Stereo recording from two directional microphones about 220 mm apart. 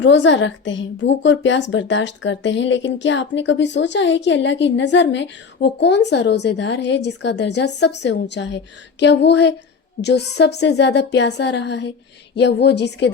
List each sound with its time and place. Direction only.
0.0 s a woman's voice: 55° left (ahead or behind)